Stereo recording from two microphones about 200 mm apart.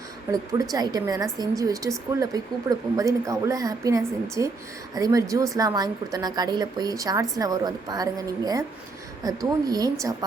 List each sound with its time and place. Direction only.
0.3 s a woman's voice: 15° right (ahead or behind)